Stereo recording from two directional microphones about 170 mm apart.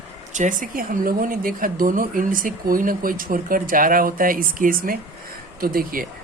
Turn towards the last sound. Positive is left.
turn(degrees=-60)  # may be behind; listen again after turning